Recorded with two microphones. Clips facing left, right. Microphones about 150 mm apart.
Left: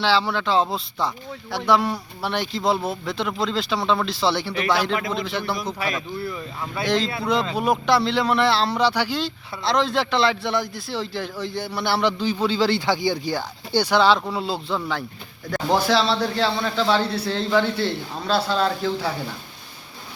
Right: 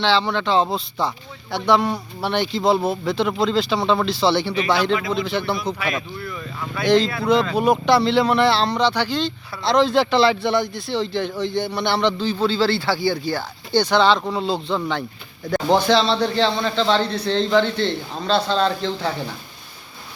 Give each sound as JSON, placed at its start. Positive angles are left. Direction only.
{"t": 0.0, "sound": "speech", "side_deg": 5}
{"t": 6.8, "sound": "a man's voice", "side_deg": 0}